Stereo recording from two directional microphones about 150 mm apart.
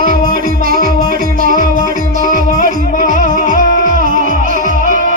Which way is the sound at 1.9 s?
70° right (ahead or behind).